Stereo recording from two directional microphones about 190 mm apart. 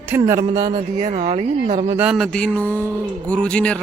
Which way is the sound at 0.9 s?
40° right (ahead or behind).